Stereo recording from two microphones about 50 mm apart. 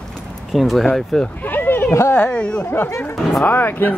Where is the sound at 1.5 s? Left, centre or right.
Left.